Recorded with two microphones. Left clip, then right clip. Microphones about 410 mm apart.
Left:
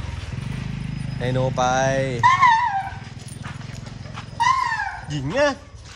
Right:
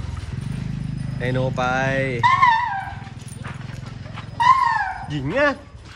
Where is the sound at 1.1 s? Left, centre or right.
Centre.